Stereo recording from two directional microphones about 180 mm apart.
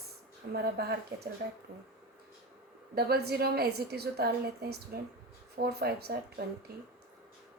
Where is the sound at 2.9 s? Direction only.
60° right (ahead or behind).